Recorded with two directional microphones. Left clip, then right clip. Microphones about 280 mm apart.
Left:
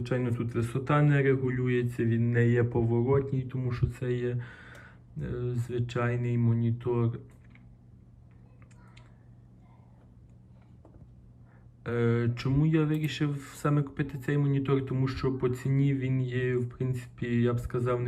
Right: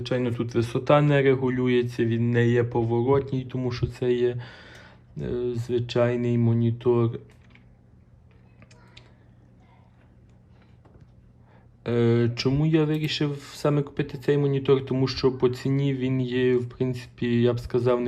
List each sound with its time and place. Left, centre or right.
0.0 s speech: centre
12.1 s speech: centre